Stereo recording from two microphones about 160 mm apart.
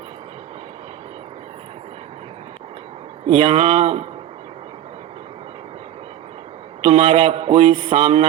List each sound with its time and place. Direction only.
3.2 s a man's voice: 35° right (ahead or behind)
6.8 s a man's voice: 35° right (ahead or behind)